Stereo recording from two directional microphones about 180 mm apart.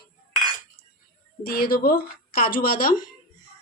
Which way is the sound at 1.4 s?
60° left (ahead or behind).